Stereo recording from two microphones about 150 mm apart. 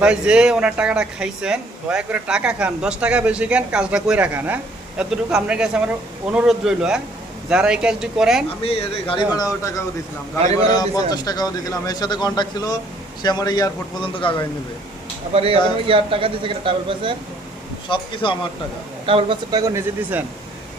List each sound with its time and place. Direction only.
0.0 s speech: 5° right (ahead or behind)
8.6 s speech: 40° left (ahead or behind)
9.4 s a man's voice: 20° left (ahead or behind)
15.3 s speech: 40° right (ahead or behind)
17.8 s speech: 35° left (ahead or behind)
19.0 s speech: 35° right (ahead or behind)
20.1 s speech: 10° right (ahead or behind)